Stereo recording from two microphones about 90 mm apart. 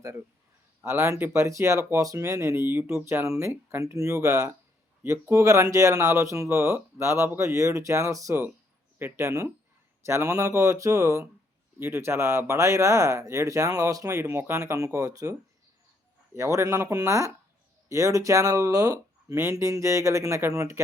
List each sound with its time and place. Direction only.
0.9 s speech: 30° right (ahead or behind)